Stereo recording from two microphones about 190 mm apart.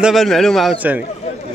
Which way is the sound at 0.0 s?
Centre (ahead or behind).